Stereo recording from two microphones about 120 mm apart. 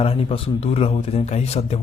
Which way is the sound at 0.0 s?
55° left (ahead or behind).